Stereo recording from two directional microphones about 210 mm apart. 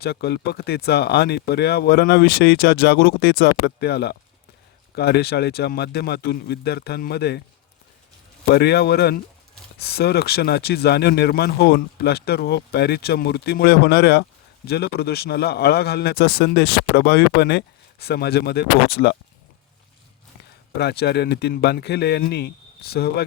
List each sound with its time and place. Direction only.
0.0 s a man's voice: 50° left (ahead or behind)
8.4 s a man's voice: 50° left (ahead or behind)
20.7 s a man's voice: 50° left (ahead or behind)